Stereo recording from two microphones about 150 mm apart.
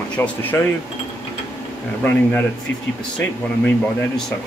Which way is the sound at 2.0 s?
15° left (ahead or behind).